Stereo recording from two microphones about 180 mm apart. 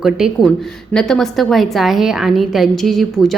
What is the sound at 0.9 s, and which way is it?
A woman's voice, 5° left (ahead or behind).